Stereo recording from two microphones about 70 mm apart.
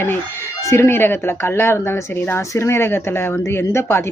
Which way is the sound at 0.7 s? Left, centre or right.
Left.